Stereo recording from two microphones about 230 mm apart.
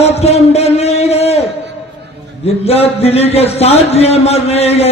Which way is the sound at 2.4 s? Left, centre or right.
Left.